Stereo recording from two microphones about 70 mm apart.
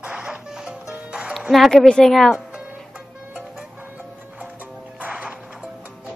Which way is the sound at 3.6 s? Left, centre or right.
Right.